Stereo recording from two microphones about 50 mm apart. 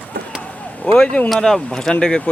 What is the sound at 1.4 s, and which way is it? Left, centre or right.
Speech, centre.